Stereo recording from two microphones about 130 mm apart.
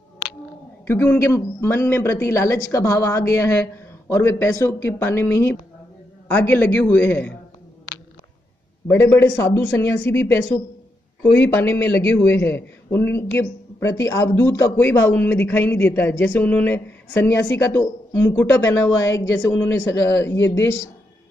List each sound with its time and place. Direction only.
0.8 s a man's voice: 20° left (ahead or behind)
8.8 s a man's voice: 20° left (ahead or behind)